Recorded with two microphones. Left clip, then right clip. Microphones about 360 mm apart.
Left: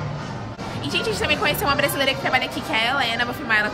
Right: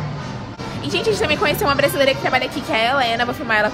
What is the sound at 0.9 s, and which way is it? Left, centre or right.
A woman's voice, centre.